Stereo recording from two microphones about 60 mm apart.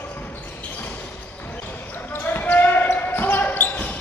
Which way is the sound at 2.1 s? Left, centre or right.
Left.